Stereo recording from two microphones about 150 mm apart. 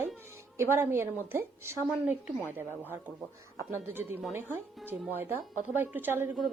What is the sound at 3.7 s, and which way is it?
Speech, 15° right (ahead or behind).